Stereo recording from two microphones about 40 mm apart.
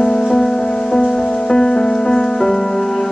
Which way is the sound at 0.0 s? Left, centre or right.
Left.